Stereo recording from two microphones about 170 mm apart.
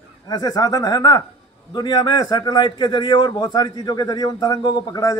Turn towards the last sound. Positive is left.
turn(degrees=20)  # may be behind; listen again after turning